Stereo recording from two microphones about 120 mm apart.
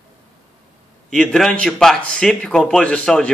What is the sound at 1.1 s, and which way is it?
Speech, 5° left (ahead or behind).